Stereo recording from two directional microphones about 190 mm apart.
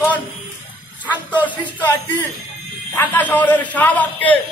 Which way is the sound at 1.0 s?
10° left (ahead or behind).